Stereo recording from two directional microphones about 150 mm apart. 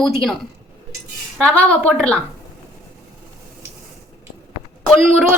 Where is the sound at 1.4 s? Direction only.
10° left (ahead or behind).